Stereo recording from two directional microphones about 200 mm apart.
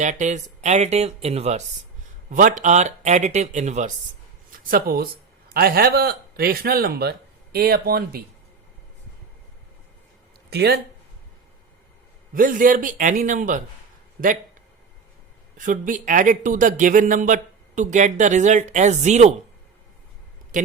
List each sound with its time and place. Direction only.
0.0 s a man's voice: 35° right (ahead or behind)
4.7 s a man's voice: 50° right (ahead or behind)
10.5 s a man's voice: 55° right (ahead or behind)
12.3 s a man's voice: 45° right (ahead or behind)
15.5 s a man's voice: 40° right (ahead or behind)